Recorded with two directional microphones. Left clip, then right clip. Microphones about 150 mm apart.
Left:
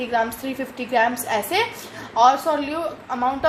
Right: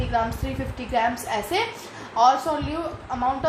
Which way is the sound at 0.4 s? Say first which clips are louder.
Left 3 dB; 40° left (ahead or behind).